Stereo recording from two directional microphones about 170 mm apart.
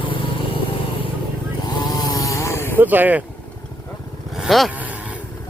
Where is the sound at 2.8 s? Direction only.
10° right (ahead or behind).